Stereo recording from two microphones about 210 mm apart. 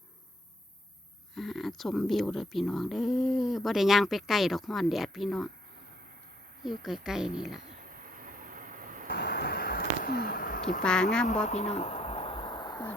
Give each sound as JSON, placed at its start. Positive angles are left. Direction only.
{"t": 1.4, "sound": "speech", "side_deg": 0}
{"t": 6.7, "sound": "speech", "side_deg": 0}
{"t": 8.0, "sound": "vehicle", "side_deg": -40}
{"t": 9.0, "sound": "a sound", "side_deg": 50}
{"t": 10.8, "sound": "speech", "side_deg": 5}
{"t": 11.4, "sound": "a sound", "side_deg": 30}